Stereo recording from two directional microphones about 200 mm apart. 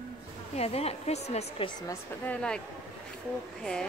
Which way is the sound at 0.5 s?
30° left (ahead or behind).